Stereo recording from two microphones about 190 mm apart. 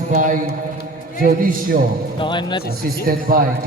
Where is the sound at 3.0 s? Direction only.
50° right (ahead or behind).